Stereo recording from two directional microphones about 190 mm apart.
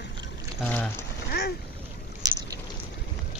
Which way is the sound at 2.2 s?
20° right (ahead or behind).